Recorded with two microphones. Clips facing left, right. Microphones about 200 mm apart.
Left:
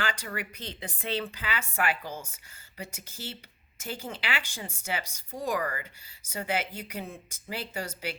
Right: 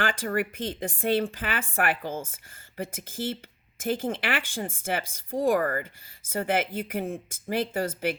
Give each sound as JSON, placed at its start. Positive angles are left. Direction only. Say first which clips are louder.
{"t": 0.0, "sound": "a woman's voice", "louder": "right 7 dB", "side_deg": -50}